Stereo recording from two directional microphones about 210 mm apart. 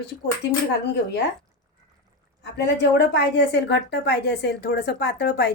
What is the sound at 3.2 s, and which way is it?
A woman's voice, 55° left (ahead or behind).